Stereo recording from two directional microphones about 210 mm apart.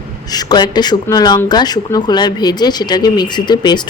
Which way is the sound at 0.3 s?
20° left (ahead or behind).